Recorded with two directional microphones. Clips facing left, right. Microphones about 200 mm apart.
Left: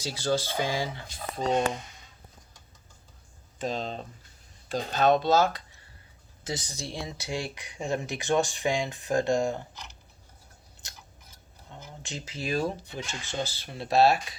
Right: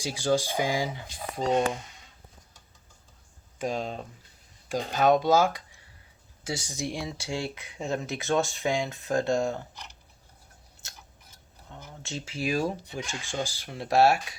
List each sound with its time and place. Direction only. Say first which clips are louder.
0.0 s speech: right 2 dB; 15° right (ahead or behind)
3.6 s speech: right 1 dB; 10° right (ahead or behind)
7.2 s speech: right 1 dB; 15° left (ahead or behind)
11.7 s speech: right 2 dB; 15° left (ahead or behind)
12.4 s speech: right 1 dB; 10° right (ahead or behind)